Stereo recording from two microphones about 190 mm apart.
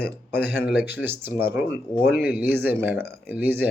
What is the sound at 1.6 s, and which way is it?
Speech, 5° left (ahead or behind).